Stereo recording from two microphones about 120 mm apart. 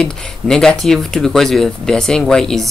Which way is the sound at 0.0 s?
5° left (ahead or behind).